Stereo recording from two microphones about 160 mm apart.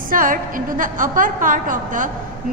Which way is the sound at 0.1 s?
60° right (ahead or behind).